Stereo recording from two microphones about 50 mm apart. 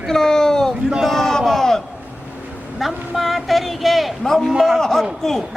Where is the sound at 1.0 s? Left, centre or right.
Centre.